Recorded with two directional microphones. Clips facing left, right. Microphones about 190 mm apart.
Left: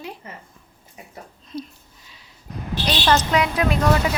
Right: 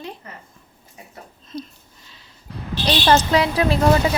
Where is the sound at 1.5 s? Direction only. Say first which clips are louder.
Even; 10° left (ahead or behind).